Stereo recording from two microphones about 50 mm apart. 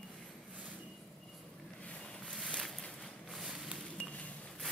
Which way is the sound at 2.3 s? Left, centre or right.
Centre.